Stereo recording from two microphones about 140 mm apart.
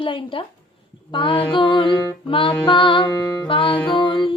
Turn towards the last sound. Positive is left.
turn(degrees=35)  # may be behind; listen again after turning